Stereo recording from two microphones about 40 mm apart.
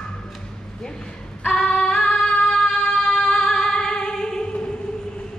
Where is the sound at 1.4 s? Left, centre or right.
Left.